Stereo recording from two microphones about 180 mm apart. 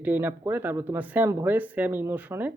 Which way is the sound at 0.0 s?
10° right (ahead or behind).